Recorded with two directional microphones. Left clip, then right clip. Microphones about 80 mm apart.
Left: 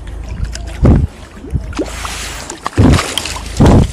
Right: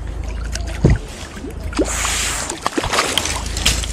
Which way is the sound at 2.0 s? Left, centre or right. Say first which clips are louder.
Right 3 dB; centre.